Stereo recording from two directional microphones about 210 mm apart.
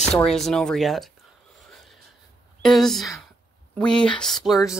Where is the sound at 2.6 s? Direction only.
Centre (ahead or behind).